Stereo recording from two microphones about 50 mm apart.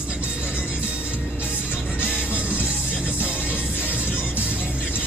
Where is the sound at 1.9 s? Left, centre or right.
Right.